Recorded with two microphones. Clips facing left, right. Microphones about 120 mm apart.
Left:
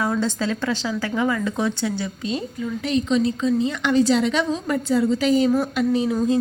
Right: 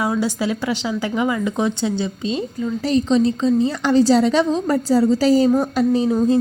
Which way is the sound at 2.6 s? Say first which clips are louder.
Right 4 dB; 35° right (ahead or behind).